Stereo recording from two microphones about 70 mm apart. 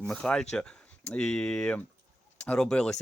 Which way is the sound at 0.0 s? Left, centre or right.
Centre.